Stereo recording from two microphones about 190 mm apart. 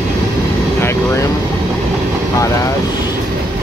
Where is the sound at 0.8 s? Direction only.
15° left (ahead or behind).